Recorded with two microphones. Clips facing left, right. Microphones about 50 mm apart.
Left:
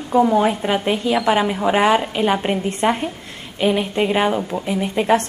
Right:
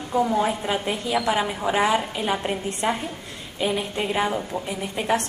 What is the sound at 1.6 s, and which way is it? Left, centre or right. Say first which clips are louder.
A woman's voice: left 4 dB; left.